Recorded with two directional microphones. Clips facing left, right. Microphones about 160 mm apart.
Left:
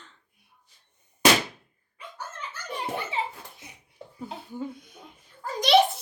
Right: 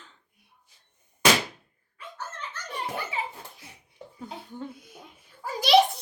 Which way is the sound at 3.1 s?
20° left (ahead or behind).